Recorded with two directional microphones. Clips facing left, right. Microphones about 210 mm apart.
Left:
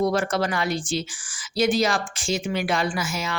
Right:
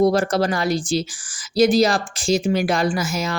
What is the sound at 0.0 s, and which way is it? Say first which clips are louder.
Speech: right 5 dB; 35° right (ahead or behind).